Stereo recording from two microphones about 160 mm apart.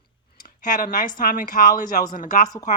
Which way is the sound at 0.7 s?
60° left (ahead or behind).